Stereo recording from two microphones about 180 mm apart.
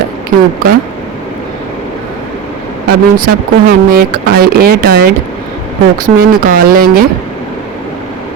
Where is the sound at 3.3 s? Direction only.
55° right (ahead or behind).